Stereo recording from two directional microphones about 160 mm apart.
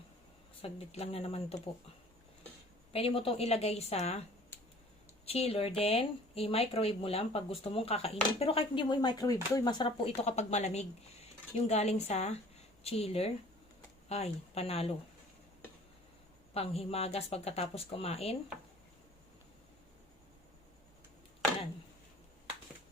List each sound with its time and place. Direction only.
0.6 s speech: 40° left (ahead or behind)
2.9 s speech: 35° left (ahead or behind)
16.6 s speech: 40° left (ahead or behind)